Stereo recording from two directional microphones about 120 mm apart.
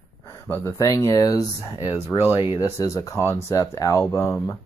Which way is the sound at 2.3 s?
45° left (ahead or behind).